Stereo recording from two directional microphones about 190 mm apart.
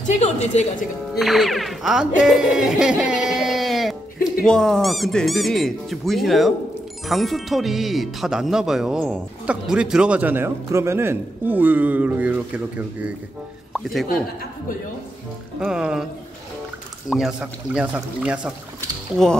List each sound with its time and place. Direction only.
0.0 s a woman's voice: 35° left (ahead or behind)
1.1 s speech: centre (ahead or behind)
15.6 s speech: 5° right (ahead or behind)
17.1 s speech: centre (ahead or behind)